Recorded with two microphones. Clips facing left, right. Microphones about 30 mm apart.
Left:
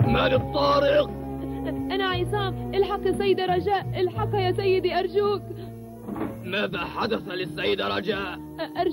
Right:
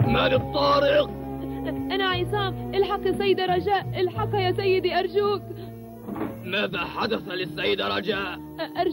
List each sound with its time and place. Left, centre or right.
0.0 s speech: centre